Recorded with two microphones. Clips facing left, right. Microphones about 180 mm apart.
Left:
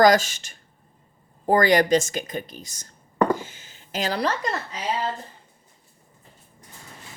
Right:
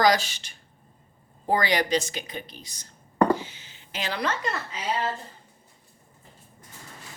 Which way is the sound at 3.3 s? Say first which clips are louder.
Even; 45° left (ahead or behind).